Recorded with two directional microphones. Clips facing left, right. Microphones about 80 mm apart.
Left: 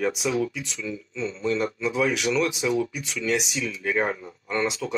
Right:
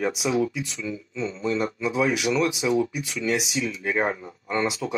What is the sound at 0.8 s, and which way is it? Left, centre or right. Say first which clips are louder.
Speech: left 1 dB; centre.